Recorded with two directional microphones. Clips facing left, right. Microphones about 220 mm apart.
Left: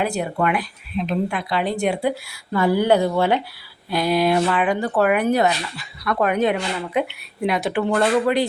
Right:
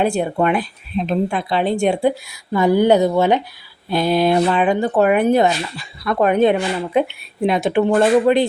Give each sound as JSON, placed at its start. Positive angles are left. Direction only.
{"t": 0.0, "sound": "speech", "side_deg": -30}